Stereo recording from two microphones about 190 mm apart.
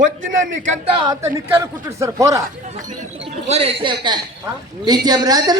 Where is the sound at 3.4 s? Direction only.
35° right (ahead or behind).